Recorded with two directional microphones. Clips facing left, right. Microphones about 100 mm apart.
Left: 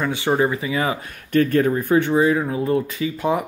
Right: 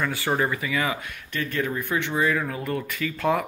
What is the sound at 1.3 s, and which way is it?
Speech, 45° left (ahead or behind).